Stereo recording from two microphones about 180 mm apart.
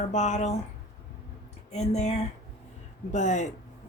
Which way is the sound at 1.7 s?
35° left (ahead or behind).